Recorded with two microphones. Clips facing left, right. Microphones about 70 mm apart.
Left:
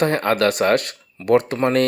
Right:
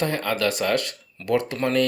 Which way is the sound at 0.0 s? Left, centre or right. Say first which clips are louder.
Left 6 dB; left.